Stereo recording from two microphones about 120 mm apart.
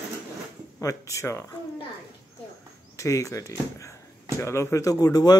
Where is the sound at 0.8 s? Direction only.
25° left (ahead or behind).